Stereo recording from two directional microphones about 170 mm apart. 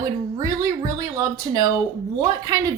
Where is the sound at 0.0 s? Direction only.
20° right (ahead or behind).